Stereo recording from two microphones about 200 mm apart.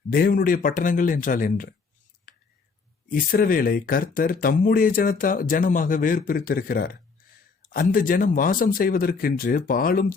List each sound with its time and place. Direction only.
0.1 s speech: 45° left (ahead or behind)
2.3 s whispering: 45° left (ahead or behind)
3.1 s speech: 45° left (ahead or behind)